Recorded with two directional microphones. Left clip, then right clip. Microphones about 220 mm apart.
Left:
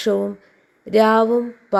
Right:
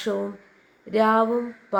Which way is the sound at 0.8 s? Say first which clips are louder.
Left 5 dB; 35° left (ahead or behind).